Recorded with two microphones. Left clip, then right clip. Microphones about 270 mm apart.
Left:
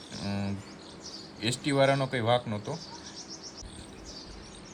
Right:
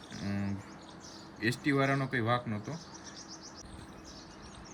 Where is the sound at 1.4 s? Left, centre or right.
Centre.